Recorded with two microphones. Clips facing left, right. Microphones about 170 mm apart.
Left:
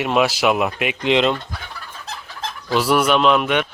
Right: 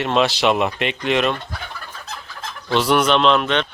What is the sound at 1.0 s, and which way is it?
Speech, 20° left (ahead or behind).